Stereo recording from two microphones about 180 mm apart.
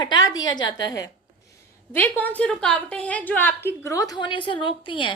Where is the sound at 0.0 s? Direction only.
25° left (ahead or behind).